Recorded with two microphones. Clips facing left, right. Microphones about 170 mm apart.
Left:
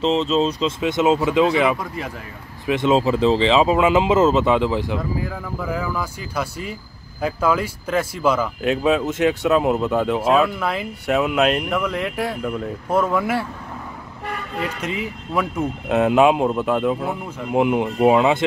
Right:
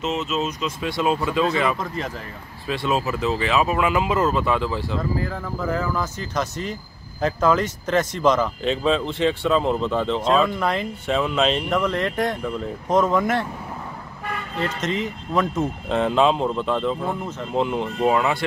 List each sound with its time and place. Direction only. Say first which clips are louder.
0.0 s speech: left 6 dB; 30° left (ahead or behind); by 13.5 s 5° left (ahead or behind)
14.6 s speech: right 2 dB; 10° left (ahead or behind)